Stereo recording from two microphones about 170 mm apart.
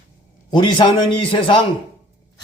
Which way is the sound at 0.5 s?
30° left (ahead or behind).